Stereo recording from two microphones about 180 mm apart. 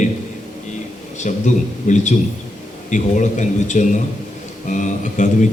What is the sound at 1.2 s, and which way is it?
A man's voice, 40° left (ahead or behind).